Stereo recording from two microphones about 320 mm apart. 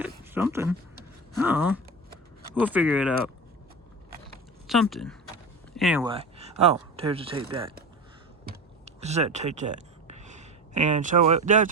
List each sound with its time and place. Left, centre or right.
0.0 s a sound: centre
1.3 s speech: centre
4.6 s speech: centre
6.1 s speech: centre
8.8 s speech: right